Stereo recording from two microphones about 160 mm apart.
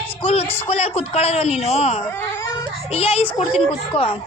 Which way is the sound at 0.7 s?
40° left (ahead or behind).